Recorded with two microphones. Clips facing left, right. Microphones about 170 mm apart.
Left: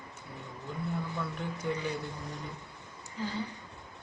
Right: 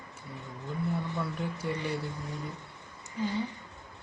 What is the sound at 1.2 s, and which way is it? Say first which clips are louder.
Speech: right 2 dB; 5° right (ahead or behind).